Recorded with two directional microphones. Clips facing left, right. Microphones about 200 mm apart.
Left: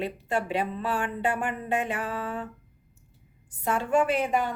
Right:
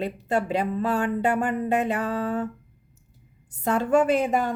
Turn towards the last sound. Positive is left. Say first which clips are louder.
# right 3 dB
turn(degrees=-40)  # may be behind; listen again after turning